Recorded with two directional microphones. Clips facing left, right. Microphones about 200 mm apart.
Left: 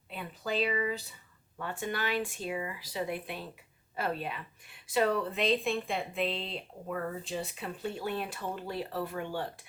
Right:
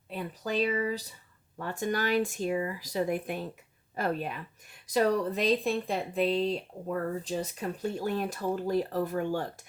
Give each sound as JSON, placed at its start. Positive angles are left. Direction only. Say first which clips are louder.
{"t": 0.1, "sound": "speech", "louder": "right 2 dB", "side_deg": -40}